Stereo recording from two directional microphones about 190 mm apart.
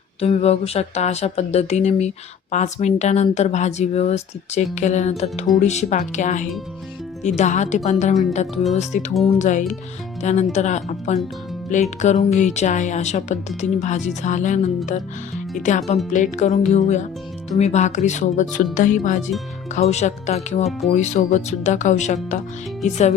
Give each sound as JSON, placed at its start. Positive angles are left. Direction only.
{"t": 0.2, "sound": "speech", "side_deg": 30}